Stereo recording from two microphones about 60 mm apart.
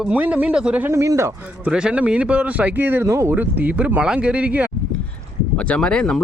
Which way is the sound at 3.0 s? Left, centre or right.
Right.